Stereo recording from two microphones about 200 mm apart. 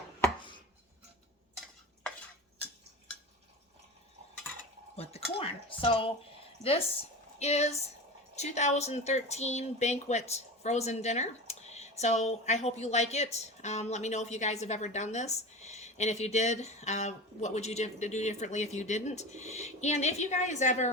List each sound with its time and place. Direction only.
5.4 s speech: 25° left (ahead or behind)